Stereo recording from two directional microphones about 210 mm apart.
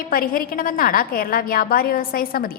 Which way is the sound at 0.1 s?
45° left (ahead or behind).